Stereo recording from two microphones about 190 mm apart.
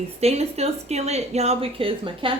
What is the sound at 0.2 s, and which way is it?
A woman's voice, 35° right (ahead or behind).